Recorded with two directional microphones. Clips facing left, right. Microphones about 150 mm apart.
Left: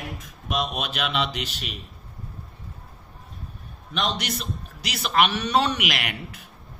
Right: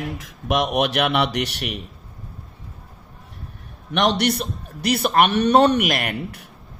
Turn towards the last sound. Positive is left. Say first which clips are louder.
# right 8 dB
turn(degrees=-50)  # may be behind; listen again after turning